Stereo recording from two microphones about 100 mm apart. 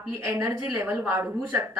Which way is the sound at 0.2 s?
30° right (ahead or behind).